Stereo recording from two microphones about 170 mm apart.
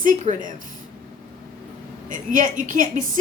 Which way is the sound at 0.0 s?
50° right (ahead or behind).